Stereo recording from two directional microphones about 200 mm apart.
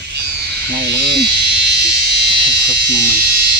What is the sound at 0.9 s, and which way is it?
Electric shaver, 60° right (ahead or behind).